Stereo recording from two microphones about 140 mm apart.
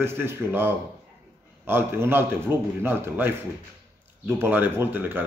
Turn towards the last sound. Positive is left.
turn(degrees=-15)  # may be behind; listen again after turning